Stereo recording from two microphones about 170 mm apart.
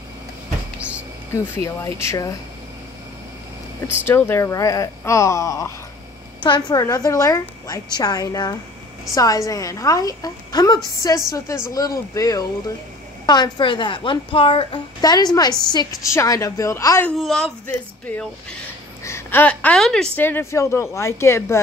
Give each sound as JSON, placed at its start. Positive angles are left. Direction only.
{"t": 0.7, "sound": "a sound", "side_deg": -10}
{"t": 1.3, "sound": "a woman's voice", "side_deg": 15}
{"t": 4.0, "sound": "a woman's voice", "side_deg": 15}
{"t": 17.2, "sound": "a woman's voice", "side_deg": 5}